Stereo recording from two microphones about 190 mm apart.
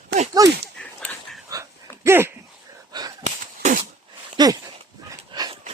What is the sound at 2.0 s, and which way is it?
Dog, 15° right (ahead or behind).